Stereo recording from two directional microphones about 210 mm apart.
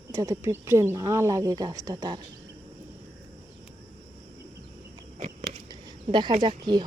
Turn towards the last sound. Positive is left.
turn(degrees=-20)  # may be behind; listen again after turning